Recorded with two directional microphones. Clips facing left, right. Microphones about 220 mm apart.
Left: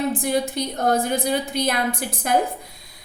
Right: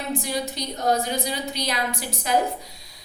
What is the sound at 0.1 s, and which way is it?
A woman's voice, 55° left (ahead or behind).